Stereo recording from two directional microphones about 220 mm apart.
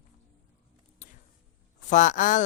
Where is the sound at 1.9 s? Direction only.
35° left (ahead or behind).